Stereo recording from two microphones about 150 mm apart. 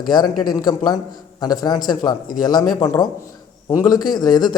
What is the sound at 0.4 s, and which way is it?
A man's voice, 30° left (ahead or behind).